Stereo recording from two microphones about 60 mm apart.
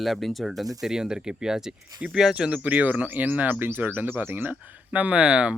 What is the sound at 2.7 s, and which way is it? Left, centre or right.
Speech, right.